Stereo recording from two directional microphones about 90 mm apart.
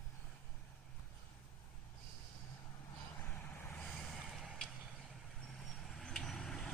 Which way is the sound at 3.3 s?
15° left (ahead or behind).